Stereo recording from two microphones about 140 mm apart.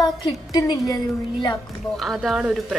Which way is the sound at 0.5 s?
25° left (ahead or behind).